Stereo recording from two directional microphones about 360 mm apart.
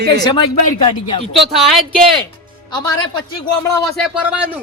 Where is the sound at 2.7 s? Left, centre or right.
Centre.